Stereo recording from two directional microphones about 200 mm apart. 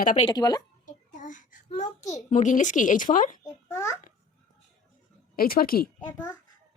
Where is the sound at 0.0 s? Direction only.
40° left (ahead or behind).